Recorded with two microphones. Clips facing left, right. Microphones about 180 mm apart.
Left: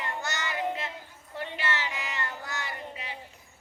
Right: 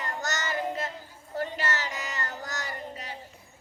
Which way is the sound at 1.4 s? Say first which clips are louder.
Right 2 dB; 40° right (ahead or behind).